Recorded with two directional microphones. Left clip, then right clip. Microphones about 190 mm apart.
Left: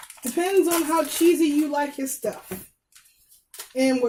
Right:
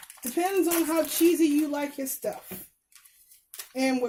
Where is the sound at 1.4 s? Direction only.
50° right (ahead or behind).